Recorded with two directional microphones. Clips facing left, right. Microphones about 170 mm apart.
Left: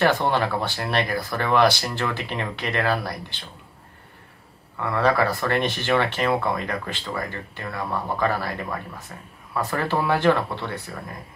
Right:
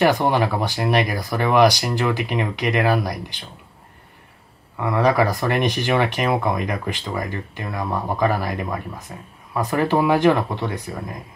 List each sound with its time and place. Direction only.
0.0 s speech: 15° right (ahead or behind)
4.7 s speech: 15° right (ahead or behind)